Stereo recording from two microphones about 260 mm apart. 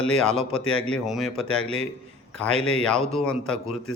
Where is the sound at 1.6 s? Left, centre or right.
Right.